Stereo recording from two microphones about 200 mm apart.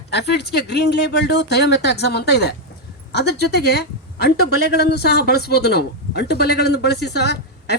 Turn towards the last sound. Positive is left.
turn(degrees=55)  # may be behind; listen again after turning